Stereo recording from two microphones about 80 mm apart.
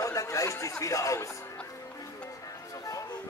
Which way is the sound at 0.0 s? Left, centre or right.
Left.